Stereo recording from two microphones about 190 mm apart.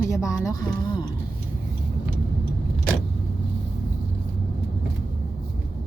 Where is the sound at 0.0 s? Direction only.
15° left (ahead or behind).